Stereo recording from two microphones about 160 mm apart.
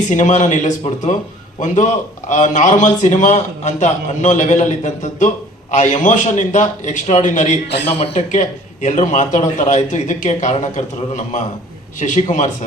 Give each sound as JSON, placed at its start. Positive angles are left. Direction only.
{"t": 0.1, "sound": "a man's voice", "side_deg": 50}
{"t": 7.9, "sound": "a man's voice", "side_deg": 40}